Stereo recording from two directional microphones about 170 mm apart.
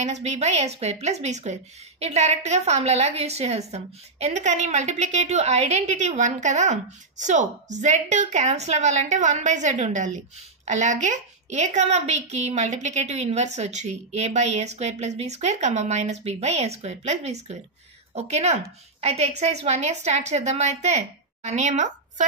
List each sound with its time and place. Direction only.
0.0 s a woman's voice: 40° right (ahead or behind)